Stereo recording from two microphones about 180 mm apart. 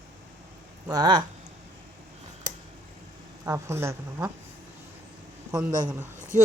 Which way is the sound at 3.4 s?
15° right (ahead or behind).